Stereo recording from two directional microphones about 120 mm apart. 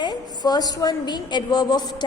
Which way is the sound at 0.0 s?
35° left (ahead or behind).